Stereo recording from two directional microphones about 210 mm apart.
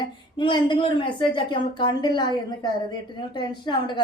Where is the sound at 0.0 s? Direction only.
20° left (ahead or behind).